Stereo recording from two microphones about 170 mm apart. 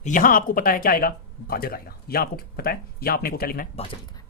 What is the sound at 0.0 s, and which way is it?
Speech, 50° left (ahead or behind).